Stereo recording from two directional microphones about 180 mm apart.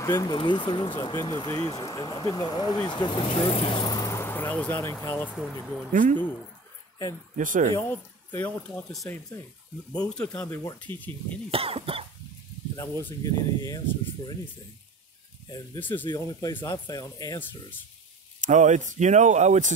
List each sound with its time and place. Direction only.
0.0 s speech: 20° left (ahead or behind)
5.9 s speech: 45° right (ahead or behind)
7.3 s speech: 45° right (ahead or behind)
7.7 s speech: 10° left (ahead or behind)
11.5 s speech: 30° right (ahead or behind)
12.7 s speech: 15° left (ahead or behind)
15.8 s speech: 10° left (ahead or behind)
18.4 s speech: 45° right (ahead or behind)